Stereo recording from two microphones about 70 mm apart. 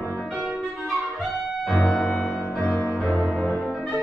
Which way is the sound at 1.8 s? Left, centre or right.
Centre.